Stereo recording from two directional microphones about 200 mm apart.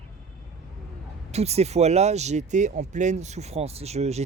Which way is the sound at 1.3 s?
30° right (ahead or behind).